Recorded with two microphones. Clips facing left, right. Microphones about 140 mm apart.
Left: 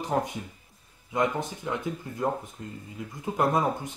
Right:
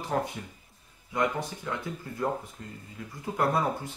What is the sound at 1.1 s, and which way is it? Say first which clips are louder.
Speech: left 2 dB; 20° left (ahead or behind).